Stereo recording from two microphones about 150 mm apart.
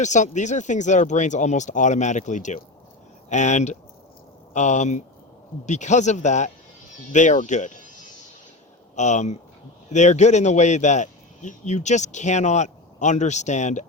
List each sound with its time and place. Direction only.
0.0 s a man's voice: 55° left (ahead or behind)
9.0 s a man's voice: 50° left (ahead or behind)